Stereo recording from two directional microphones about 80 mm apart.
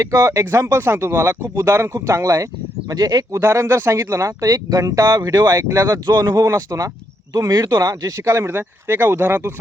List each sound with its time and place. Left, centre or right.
0.0 s speech: right
2.9 s speech: right
3.4 s speech: right
4.4 s speech: right
5.6 s speech: right
5.9 s speech: right
6.4 s speech: right